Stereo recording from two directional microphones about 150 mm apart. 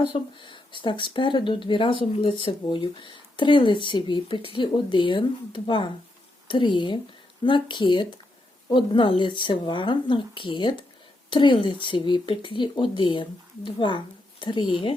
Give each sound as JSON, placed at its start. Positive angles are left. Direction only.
{"t": 0.0, "sound": "speech", "side_deg": 35}